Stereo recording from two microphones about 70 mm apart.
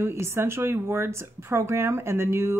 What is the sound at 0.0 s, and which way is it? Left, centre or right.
Speech, right.